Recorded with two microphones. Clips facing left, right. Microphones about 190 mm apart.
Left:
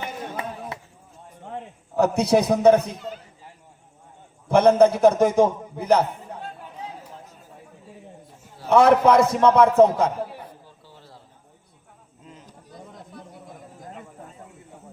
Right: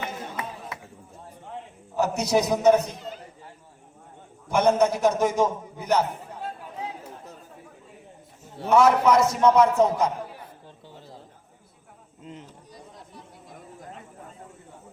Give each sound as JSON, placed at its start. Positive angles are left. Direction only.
{"t": 2.0, "sound": "a man's voice", "side_deg": 55}
{"t": 4.4, "sound": "a man's voice", "side_deg": 55}
{"t": 8.7, "sound": "a man's voice", "side_deg": 60}